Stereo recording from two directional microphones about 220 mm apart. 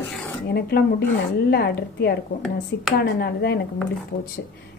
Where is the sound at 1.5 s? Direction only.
45° left (ahead or behind).